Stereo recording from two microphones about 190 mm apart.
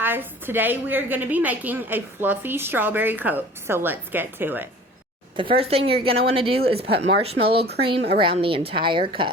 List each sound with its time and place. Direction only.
0.0 s a woman's voice: 10° right (ahead or behind)
5.4 s a woman's voice: 30° right (ahead or behind)